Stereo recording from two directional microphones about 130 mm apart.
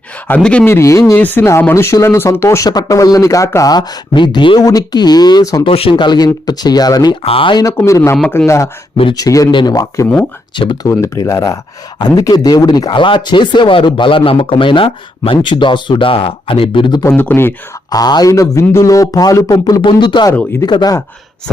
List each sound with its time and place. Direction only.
0.3 s speech: 10° left (ahead or behind)
0.7 s speech: 20° left (ahead or behind)
5.6 s speech: 45° left (ahead or behind)
7.3 s speech: 40° left (ahead or behind)
7.9 s speech: 20° left (ahead or behind)
10.5 s speech: 40° left (ahead or behind)
10.8 s speech: 25° left (ahead or behind); by 17.0 s 40° left (ahead or behind)
17.0 s speech: 15° left (ahead or behind)
17.9 s speech: 30° left (ahead or behind)